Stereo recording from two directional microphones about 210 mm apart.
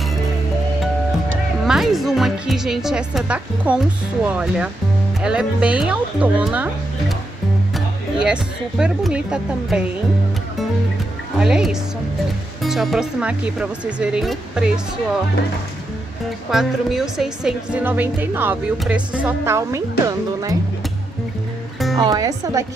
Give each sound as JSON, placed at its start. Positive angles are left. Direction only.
{"t": 1.7, "sound": "a woman's voice", "side_deg": 0}
{"t": 11.3, "sound": "speech", "side_deg": -5}
{"t": 16.4, "sound": "a woman's voice", "side_deg": 0}
{"t": 21.9, "sound": "a woman's voice", "side_deg": -15}